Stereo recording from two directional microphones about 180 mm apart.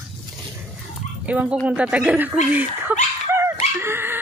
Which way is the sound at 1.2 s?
10° right (ahead or behind).